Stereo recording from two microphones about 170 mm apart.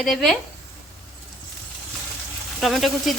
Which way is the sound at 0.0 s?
5° left (ahead or behind).